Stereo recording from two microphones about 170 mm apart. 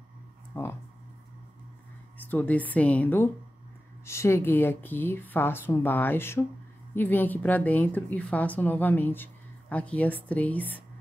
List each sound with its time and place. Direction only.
0.5 s a woman's voice: 10° left (ahead or behind)
2.1 s a woman's voice: 10° left (ahead or behind)